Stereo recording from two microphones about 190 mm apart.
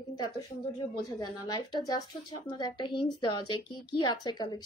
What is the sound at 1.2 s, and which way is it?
Speech, 20° left (ahead or behind).